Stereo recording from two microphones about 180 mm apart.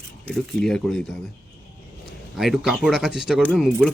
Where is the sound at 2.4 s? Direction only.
Centre (ahead or behind).